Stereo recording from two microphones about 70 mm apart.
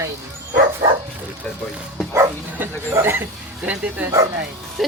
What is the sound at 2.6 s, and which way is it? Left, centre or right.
A woman's voice, right.